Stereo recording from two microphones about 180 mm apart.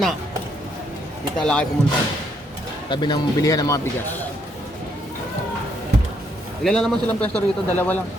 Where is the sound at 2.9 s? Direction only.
25° left (ahead or behind).